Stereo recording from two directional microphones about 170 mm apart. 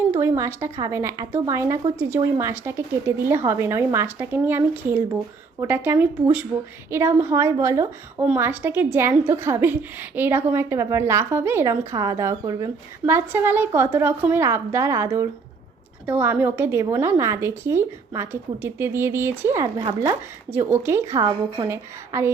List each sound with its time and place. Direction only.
0.1 s a woman's voice: 15° right (ahead or behind)